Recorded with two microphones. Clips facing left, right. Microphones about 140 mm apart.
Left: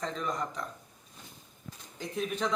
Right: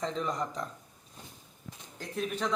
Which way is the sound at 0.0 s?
20° right (ahead or behind).